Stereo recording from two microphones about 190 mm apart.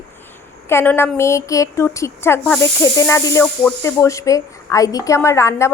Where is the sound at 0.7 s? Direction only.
10° left (ahead or behind).